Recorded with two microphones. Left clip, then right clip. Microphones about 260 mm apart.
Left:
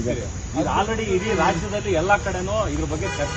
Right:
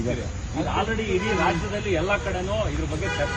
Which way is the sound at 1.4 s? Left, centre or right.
Centre.